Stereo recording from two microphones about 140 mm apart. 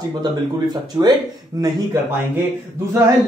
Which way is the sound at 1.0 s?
25° right (ahead or behind).